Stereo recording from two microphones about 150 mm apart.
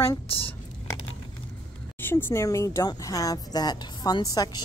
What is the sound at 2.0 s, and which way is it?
Speech, 15° left (ahead or behind).